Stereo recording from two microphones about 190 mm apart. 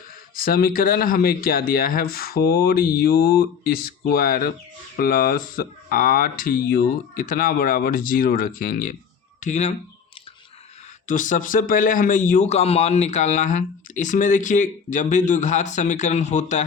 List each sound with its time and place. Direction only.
0.3 s a man's voice: 50° left (ahead or behind)
11.1 s a man's voice: 45° left (ahead or behind)